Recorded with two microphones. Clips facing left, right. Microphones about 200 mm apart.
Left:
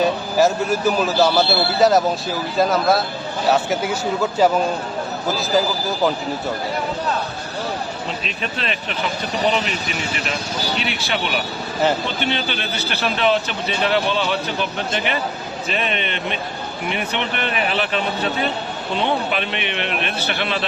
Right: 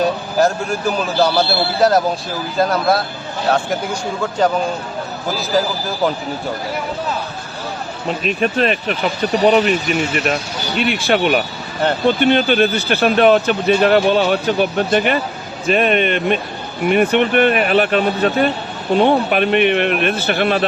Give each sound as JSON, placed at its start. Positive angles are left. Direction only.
{"t": 0.0, "sound": "a man's voice", "side_deg": 0}
{"t": 4.2, "sound": "a man's voice", "side_deg": 5}
{"t": 8.2, "sound": "speech", "side_deg": -50}
{"t": 10.8, "sound": "speech", "side_deg": -50}